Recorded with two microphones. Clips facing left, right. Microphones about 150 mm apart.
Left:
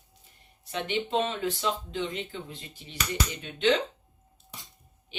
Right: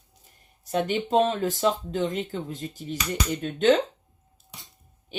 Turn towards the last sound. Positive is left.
turn(degrees=-45)  # may be behind; listen again after turning